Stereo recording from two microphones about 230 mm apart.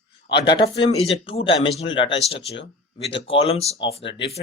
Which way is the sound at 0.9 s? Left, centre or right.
Left.